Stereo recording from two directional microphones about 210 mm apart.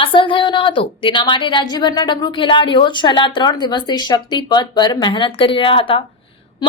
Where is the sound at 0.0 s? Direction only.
25° left (ahead or behind).